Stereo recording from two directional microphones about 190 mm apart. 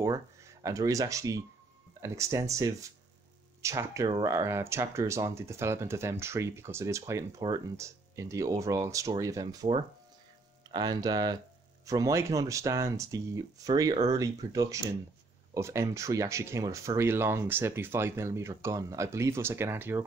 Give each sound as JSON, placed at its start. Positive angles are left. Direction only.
{"t": 0.0, "sound": "speech", "side_deg": -15}